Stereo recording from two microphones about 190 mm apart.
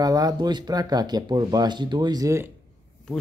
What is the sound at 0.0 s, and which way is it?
Speech, 20° right (ahead or behind).